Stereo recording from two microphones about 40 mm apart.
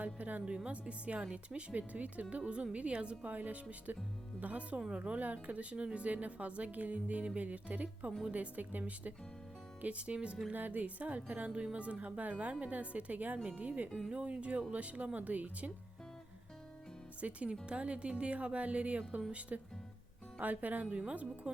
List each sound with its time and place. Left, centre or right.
0.0 s a woman's voice: right
0.4 s a woman's voice: right
2.3 s a woman's voice: right
3.2 s a woman's voice: right
9.8 s a woman's voice: right
10.5 s a woman's voice: right
11.5 s a woman's voice: right
17.2 s a woman's voice: right
20.4 s speech: right
21.5 s speech: right